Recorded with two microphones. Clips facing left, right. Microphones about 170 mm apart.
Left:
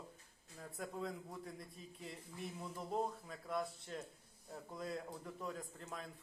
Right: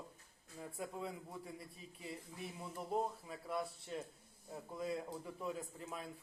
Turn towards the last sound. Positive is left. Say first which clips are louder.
# right 2 dB
turn(degrees=-5)  # may be behind; listen again after turning